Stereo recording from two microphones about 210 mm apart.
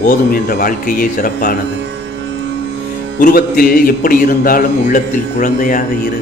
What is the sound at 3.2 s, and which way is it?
Speech, 40° left (ahead or behind).